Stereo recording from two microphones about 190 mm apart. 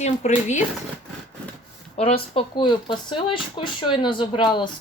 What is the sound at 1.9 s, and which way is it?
Speech, 30° left (ahead or behind).